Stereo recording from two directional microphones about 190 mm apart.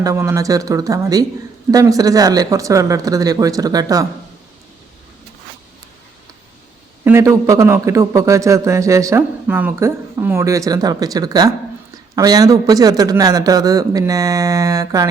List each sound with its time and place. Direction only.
0.0 s a man's voice: 15° right (ahead or behind)
7.0 s a man's voice: 15° right (ahead or behind)